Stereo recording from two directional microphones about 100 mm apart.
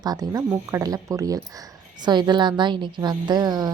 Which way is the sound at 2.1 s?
45° right (ahead or behind).